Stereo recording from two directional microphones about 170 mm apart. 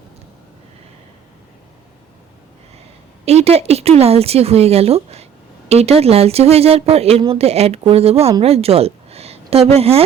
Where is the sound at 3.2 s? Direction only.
35° right (ahead or behind).